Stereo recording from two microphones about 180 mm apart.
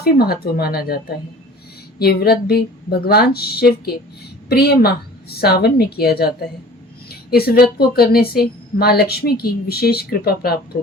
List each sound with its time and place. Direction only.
0.0 s a woman's voice: 60° left (ahead or behind)